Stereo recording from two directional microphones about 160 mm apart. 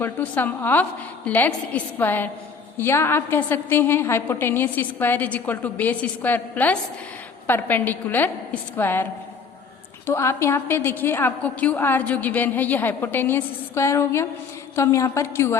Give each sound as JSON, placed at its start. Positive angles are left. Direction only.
{"t": 0.0, "sound": "a woman's voice", "side_deg": 10}
{"t": 10.1, "sound": "a woman's voice", "side_deg": 15}